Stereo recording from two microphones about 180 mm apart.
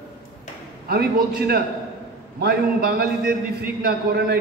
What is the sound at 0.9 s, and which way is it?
A man's voice, 60° right (ahead or behind).